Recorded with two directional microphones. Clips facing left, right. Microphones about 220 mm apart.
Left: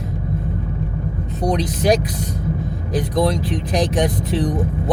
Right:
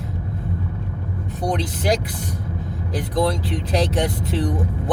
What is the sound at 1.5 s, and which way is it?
Speech, 20° left (ahead or behind).